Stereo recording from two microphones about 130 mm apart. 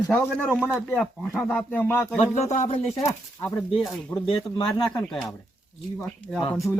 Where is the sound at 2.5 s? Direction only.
60° left (ahead or behind).